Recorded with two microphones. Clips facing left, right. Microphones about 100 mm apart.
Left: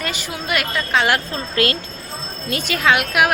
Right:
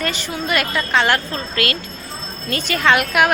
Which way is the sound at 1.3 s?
25° left (ahead or behind).